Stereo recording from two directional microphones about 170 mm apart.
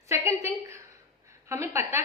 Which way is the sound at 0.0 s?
15° right (ahead or behind).